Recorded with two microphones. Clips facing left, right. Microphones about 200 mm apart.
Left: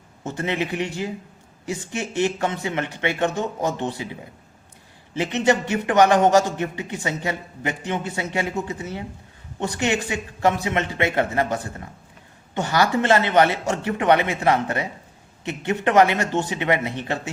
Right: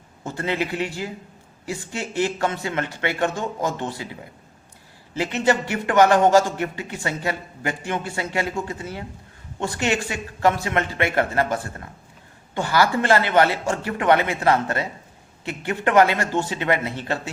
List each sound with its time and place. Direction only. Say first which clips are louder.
0.3 s a man's voice: even; 20° left (ahead or behind)